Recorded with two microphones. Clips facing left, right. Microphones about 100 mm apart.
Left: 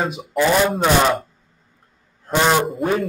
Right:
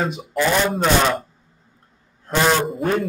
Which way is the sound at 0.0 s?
Centre (ahead or behind).